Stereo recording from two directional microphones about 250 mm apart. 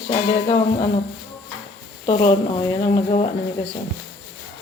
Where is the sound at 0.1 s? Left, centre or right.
Left.